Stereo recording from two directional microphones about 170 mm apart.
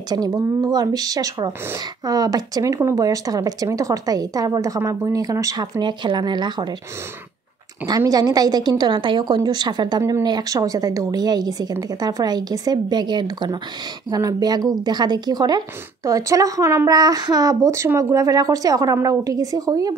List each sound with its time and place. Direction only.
0.1 s speech: 20° right (ahead or behind)
7.8 s speech: 20° right (ahead or behind)